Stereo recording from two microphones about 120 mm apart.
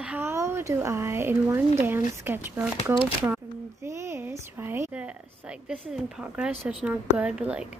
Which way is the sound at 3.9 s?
20° right (ahead or behind).